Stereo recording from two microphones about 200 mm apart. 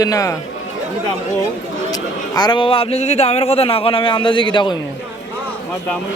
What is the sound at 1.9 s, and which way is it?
A man's voice, 20° left (ahead or behind).